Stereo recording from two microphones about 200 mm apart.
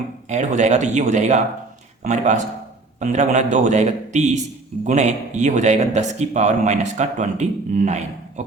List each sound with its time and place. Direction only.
0.3 s a man's voice: 35° right (ahead or behind)